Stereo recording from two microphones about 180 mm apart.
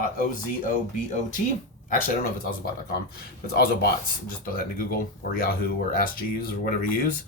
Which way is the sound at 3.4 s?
60° left (ahead or behind).